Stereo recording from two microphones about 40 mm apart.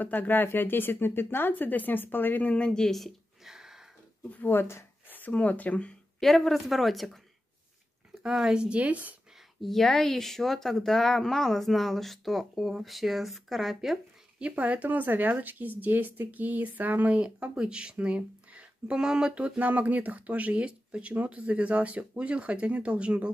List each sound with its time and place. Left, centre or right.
0.0 s speech: left
1.5 s speech: left
2.5 s speech: left
2.8 s speech: centre
3.4 s a sound: centre
5.3 s speech: left
6.1 s speech: centre
8.4 s speech: centre
8.6 s speech: right
9.6 s speech: centre
14.5 s speech: right
17.2 s speech: right
18.9 s speech: centre
19.3 s speech: right